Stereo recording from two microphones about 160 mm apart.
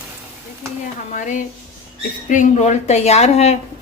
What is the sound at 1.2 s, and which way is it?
A woman's voice, 50° left (ahead or behind).